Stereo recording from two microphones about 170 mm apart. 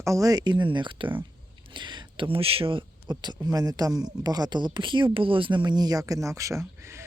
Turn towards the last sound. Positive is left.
turn(degrees=-15)  # may be behind; listen again after turning